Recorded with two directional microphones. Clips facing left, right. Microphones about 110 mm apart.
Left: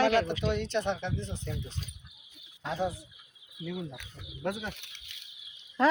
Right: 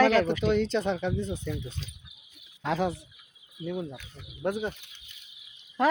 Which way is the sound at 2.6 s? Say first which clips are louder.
Right 4 dB; 90° right.